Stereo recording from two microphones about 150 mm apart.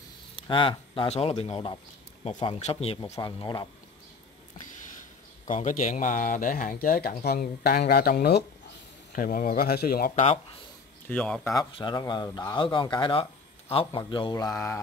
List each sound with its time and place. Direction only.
0.4 s speech: 35° left (ahead or behind)
5.5 s speech: 60° left (ahead or behind); by 8.5 s 90° left
9.1 s speech: 65° left (ahead or behind); by 10.1 s 85° left
10.1 s speech: 45° left (ahead or behind)
11.1 s speech: 5° left (ahead or behind)
11.4 s speech: 25° left (ahead or behind)
14.3 s speech: 25° left (ahead or behind)